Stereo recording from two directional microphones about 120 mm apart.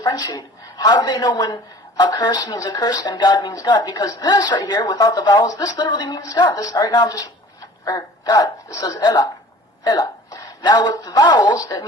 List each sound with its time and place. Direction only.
0.0 s a woman's voice: 30° left (ahead or behind)